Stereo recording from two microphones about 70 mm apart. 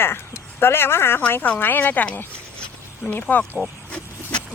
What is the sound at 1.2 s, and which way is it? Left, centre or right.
Speech, left.